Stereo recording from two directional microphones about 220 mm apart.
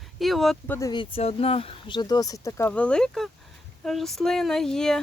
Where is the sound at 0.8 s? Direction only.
20° left (ahead or behind).